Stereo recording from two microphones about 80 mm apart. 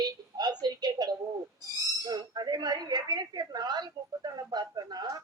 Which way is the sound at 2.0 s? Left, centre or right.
Right.